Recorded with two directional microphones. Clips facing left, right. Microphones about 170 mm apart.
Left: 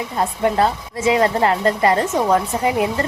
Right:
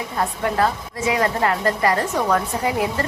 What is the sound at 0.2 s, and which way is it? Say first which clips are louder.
A woman's voice: left 3 dB; 25° left (ahead or behind).